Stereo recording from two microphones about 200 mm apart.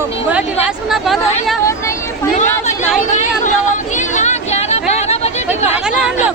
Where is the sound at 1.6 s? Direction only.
15° left (ahead or behind).